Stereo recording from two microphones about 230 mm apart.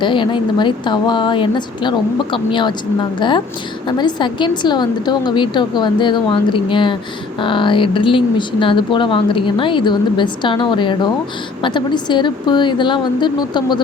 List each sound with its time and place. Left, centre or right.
0.0 s speech: left